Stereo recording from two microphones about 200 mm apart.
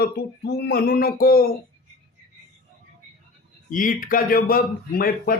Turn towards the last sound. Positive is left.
turn(degrees=50)  # may be behind; listen again after turning